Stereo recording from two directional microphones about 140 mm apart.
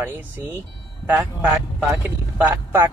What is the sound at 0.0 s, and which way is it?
Speech, 15° right (ahead or behind).